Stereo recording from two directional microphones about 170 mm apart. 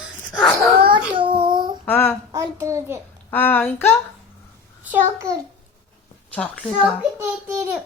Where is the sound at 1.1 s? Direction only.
30° right (ahead or behind).